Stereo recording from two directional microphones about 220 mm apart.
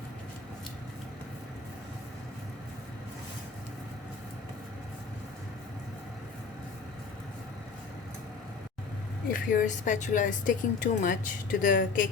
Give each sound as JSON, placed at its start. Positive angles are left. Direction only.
{"t": 9.3, "sound": "speech", "side_deg": 35}